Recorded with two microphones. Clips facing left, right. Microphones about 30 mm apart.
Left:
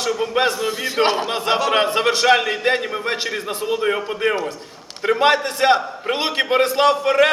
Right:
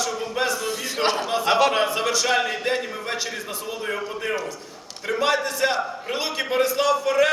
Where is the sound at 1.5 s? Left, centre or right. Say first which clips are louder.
Right 1 dB; centre.